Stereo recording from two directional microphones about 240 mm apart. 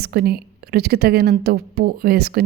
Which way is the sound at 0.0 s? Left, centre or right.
Right.